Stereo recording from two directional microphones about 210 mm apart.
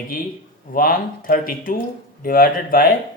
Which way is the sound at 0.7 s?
45° left (ahead or behind).